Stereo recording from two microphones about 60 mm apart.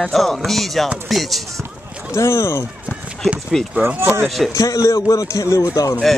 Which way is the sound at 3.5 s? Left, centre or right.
Centre.